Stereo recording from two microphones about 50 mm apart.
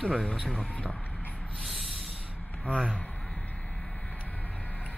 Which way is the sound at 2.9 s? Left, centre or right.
Left.